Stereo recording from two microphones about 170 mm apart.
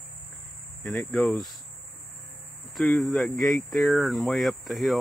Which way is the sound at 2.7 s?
Centre (ahead or behind).